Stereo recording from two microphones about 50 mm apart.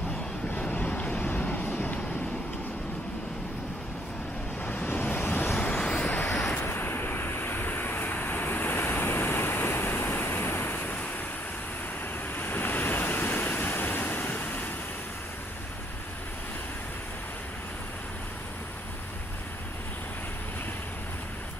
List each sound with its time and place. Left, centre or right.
0.7 s vehicle: left
1.7 s vehicle: left
4.6 s vehicle: left
5.8 s vehicle: centre
6.0 s vehicle: left
6.6 s vehicle: left
12.4 s vehicle: left